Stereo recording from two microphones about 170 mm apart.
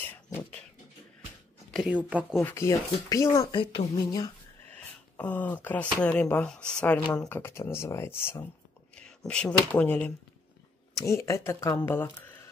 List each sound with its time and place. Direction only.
1.7 s speech: 5° right (ahead or behind)
2.4 s speech: 15° left (ahead or behind)
4.7 s speech: 10° left (ahead or behind)
8.9 s a sound: 5° left (ahead or behind)
9.7 s speech: 10° left (ahead or behind)